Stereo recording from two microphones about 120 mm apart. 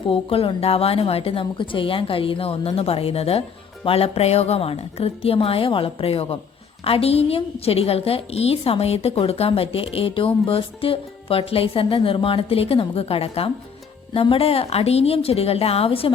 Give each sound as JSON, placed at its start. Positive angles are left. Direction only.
{"t": 0.1, "sound": "a woman's voice", "side_deg": 50}